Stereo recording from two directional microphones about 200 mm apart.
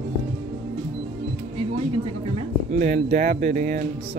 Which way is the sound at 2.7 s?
35° right (ahead or behind).